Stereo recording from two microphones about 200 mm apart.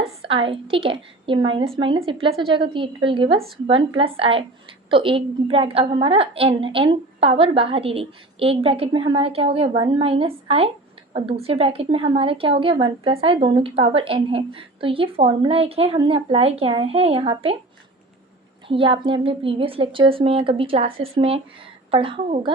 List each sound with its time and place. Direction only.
0.0 s a woman's voice: 25° right (ahead or behind)
18.7 s a woman's voice: 25° right (ahead or behind)